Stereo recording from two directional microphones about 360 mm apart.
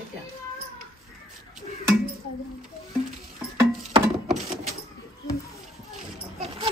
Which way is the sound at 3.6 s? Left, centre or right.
Centre.